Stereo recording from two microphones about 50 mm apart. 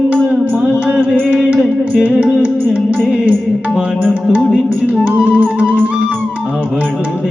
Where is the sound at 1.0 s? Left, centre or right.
Right.